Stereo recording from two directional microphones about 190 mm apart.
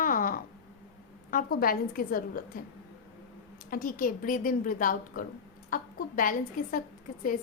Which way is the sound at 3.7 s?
50° left (ahead or behind).